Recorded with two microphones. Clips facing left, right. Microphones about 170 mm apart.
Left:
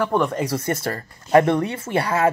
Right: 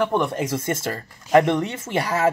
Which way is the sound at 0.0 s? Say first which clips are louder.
Left 1 dB; 20° right (ahead or behind).